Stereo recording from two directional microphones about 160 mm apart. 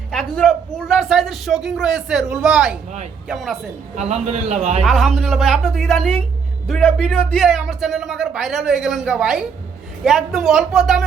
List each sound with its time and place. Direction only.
0.1 s a man's voice: 5° left (ahead or behind)
3.9 s a man's voice: 45° right (ahead or behind)
4.8 s a man's voice: centre (ahead or behind)